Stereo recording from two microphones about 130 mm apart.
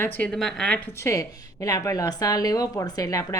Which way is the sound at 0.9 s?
20° left (ahead or behind).